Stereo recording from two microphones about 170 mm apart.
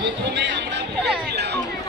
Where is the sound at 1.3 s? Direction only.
75° right (ahead or behind).